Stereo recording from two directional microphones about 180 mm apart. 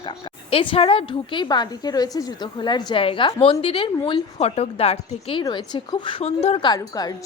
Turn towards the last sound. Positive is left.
turn(degrees=20)  # may be behind; listen again after turning